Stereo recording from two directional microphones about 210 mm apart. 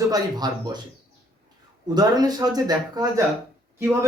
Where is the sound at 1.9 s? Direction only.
20° right (ahead or behind).